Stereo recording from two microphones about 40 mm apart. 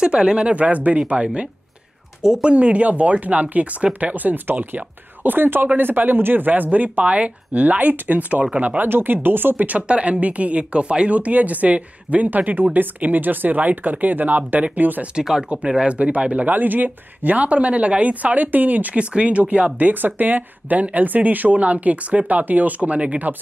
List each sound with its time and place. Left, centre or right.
0.0 s speech: right
8.8 s speech: right
9.7 s speech: right
15.7 s speech: right
18.9 s speech: right
22.8 s speech: right